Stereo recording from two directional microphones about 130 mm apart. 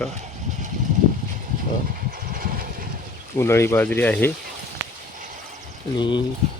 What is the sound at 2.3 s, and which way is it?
Vehicle, 90° right.